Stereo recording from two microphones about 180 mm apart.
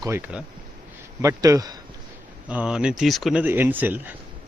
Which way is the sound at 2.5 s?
5° right (ahead or behind).